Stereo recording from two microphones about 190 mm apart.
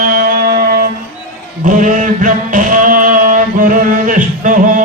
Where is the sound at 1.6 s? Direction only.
45° right (ahead or behind).